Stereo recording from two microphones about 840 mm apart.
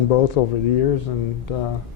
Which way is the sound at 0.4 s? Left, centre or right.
Left.